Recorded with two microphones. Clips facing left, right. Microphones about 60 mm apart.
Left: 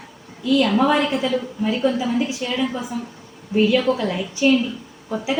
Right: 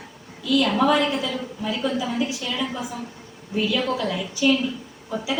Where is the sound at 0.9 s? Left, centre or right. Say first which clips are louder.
Left 3 dB; left.